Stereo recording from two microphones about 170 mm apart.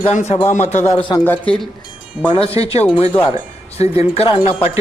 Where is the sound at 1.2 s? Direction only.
10° left (ahead or behind).